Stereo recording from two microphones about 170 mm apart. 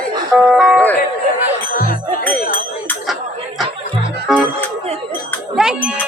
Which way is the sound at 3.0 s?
Centre (ahead or behind).